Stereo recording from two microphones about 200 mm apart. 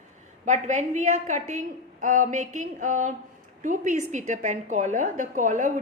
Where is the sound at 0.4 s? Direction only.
35° right (ahead or behind).